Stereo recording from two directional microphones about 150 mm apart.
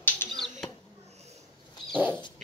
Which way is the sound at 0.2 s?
15° left (ahead or behind).